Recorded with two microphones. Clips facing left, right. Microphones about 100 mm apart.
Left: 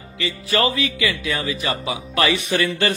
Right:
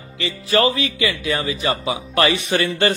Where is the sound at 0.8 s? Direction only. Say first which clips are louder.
Right 1 dB; 30° right (ahead or behind).